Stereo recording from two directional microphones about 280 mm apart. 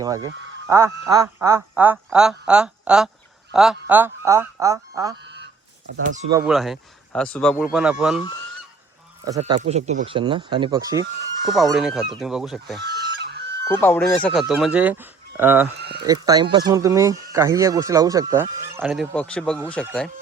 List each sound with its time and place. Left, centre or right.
0.0 s speech: centre
5.2 s goose: right
6.3 s speech: centre
9.4 s speech: right
11.5 s speech: centre
12.8 s chicken: right
13.7 s speech: centre
15.8 s speech: right
16.0 s speech: centre